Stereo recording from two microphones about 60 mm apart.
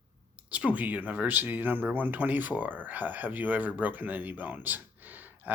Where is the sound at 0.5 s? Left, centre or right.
Right.